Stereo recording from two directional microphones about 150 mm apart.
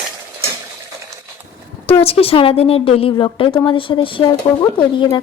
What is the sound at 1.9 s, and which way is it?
A woman's voice, 40° left (ahead or behind).